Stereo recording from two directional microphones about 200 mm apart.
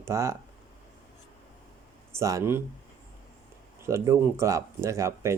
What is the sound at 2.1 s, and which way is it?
Speech, 15° right (ahead or behind).